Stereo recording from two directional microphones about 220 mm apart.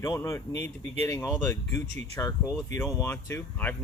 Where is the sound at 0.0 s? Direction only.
15° left (ahead or behind).